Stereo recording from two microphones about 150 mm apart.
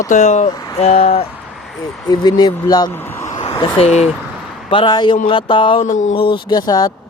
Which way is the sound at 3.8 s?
45° left (ahead or behind).